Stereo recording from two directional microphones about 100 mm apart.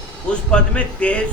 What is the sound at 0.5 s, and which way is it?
Speech, 10° left (ahead or behind).